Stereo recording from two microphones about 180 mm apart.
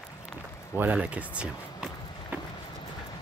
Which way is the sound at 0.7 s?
10° right (ahead or behind).